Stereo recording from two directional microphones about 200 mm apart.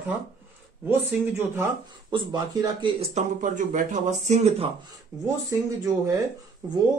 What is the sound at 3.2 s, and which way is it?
Speech, 40° right (ahead or behind).